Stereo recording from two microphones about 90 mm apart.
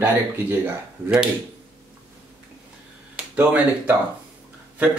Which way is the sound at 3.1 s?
15° right (ahead or behind).